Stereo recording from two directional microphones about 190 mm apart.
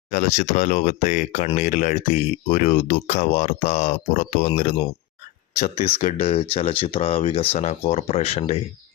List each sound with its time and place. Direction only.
0.1 s speech: 35° left (ahead or behind)